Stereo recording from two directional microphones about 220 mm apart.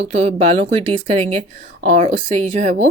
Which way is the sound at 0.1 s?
30° right (ahead or behind).